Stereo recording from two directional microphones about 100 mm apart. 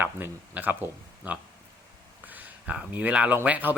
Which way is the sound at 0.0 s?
20° right (ahead or behind).